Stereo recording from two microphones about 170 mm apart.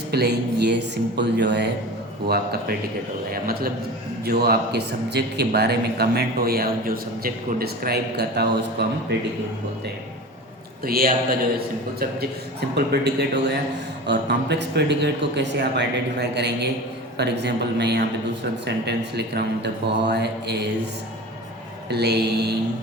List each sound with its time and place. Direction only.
0.1 s speech: 70° right (ahead or behind)
2.2 s a man's voice: 70° right (ahead or behind)
10.8 s a man's voice: 60° right (ahead or behind)
14.1 s a man's voice: 90° right
21.8 s a man's voice: 75° right (ahead or behind)